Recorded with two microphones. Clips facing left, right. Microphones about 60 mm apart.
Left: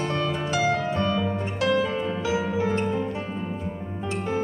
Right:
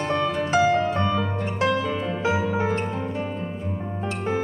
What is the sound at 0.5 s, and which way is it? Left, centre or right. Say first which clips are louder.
Music: right 5 dB; right.